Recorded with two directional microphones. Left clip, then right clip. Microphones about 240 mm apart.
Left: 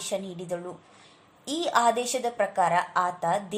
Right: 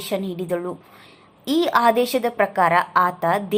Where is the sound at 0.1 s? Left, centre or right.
Right.